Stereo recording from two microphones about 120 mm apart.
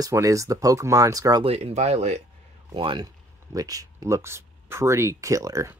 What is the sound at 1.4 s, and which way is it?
Speech, 55° right (ahead or behind).